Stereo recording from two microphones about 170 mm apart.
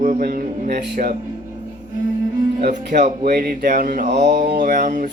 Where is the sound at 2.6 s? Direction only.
50° right (ahead or behind).